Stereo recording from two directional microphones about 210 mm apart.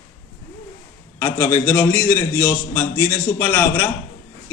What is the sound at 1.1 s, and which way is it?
A man's voice, 10° left (ahead or behind).